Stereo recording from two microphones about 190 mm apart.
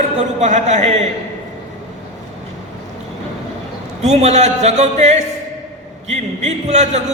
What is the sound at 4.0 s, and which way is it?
A man's voice, 35° right (ahead or behind).